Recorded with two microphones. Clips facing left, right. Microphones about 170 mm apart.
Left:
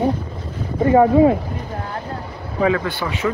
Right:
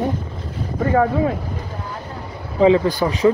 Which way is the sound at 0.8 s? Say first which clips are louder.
Left 4 dB; 20° left (ahead or behind).